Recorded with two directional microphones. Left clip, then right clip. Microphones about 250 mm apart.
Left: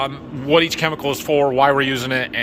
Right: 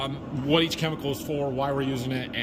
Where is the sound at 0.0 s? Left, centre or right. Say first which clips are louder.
Left 7 dB; centre.